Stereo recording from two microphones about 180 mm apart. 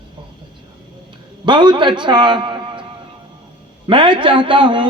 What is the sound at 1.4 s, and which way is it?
A man's voice, 25° right (ahead or behind).